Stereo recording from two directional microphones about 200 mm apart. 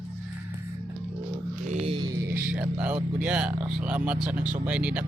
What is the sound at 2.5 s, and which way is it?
Speech, 10° right (ahead or behind).